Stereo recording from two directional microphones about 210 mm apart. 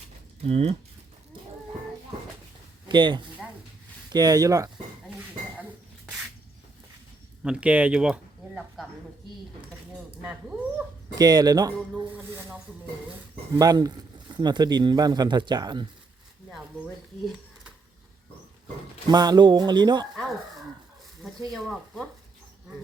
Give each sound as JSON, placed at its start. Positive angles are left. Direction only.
{"t": 0.4, "sound": "speech", "side_deg": -30}
{"t": 2.9, "sound": "speech", "side_deg": -20}
{"t": 5.0, "sound": "a sound", "side_deg": -5}
{"t": 7.4, "sound": "speech", "side_deg": -5}
{"t": 11.1, "sound": "speech", "side_deg": -20}
{"t": 16.5, "sound": "a sound", "side_deg": 0}
{"t": 19.0, "sound": "speech", "side_deg": -20}
{"t": 21.5, "sound": "speech", "side_deg": 0}